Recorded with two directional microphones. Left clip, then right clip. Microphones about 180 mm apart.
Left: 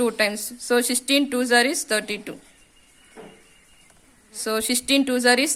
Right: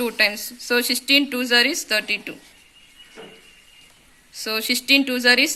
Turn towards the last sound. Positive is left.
turn(degrees=50)  # may be behind; listen again after turning